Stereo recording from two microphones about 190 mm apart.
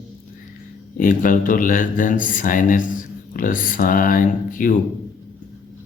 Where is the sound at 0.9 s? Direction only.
45° left (ahead or behind).